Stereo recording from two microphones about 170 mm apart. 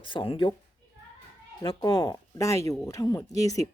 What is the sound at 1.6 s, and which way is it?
A woman's voice, 30° left (ahead or behind).